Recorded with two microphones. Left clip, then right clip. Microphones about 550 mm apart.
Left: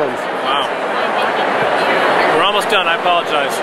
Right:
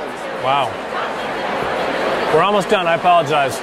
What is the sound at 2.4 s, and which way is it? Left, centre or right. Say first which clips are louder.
Speech: left 2 dB; right.